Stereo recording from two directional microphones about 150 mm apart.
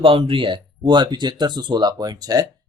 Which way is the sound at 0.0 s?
35° right (ahead or behind).